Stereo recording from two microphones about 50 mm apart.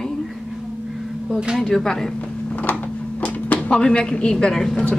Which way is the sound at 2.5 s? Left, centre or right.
Left.